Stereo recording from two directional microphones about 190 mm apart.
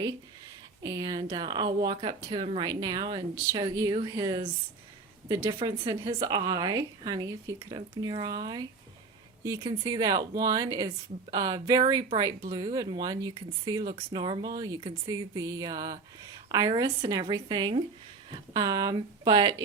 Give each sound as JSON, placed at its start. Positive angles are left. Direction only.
{"t": 0.8, "sound": "speech", "side_deg": -20}